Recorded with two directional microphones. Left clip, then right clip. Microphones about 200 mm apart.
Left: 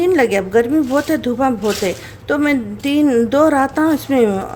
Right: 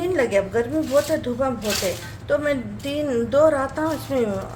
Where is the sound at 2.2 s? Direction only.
55° left (ahead or behind).